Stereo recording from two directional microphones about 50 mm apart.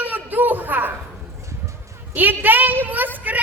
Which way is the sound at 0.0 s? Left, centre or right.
Right.